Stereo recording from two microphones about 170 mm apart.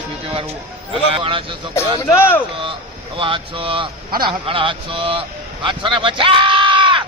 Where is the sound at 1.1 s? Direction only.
30° right (ahead or behind).